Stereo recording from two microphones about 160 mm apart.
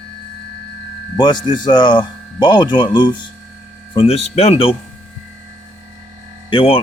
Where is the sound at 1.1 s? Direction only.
25° left (ahead or behind).